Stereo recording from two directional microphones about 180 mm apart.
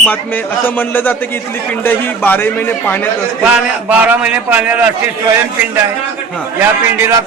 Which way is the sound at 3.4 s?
10° right (ahead or behind).